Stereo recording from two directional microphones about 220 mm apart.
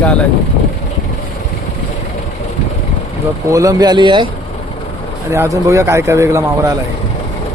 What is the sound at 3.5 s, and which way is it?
Speech, 15° right (ahead or behind).